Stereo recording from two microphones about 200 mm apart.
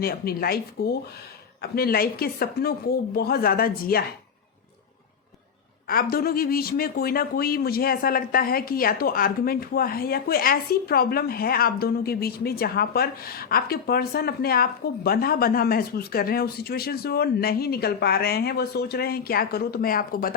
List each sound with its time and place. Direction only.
0.0 s speech: 50° left (ahead or behind)
5.9 s speech: 45° left (ahead or behind)